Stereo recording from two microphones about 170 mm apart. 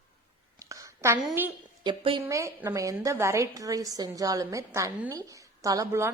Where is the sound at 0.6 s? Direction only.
20° right (ahead or behind).